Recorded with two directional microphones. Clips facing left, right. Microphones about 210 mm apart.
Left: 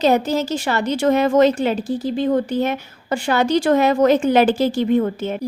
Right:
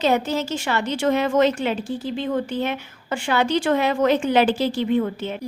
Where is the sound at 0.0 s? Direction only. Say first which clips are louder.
Left 4 dB; 40° left (ahead or behind).